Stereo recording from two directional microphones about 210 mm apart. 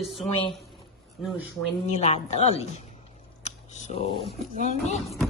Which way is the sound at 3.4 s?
30° left (ahead or behind).